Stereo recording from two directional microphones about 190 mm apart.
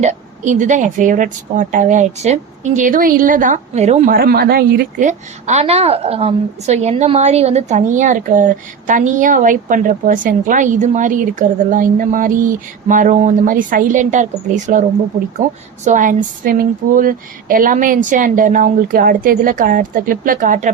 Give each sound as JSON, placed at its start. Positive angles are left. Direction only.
{"t": 0.0, "sound": "a woman's voice", "side_deg": -40}
{"t": 4.1, "sound": "a woman's voice", "side_deg": -50}